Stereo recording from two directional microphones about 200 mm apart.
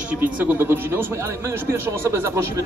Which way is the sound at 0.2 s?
10° right (ahead or behind).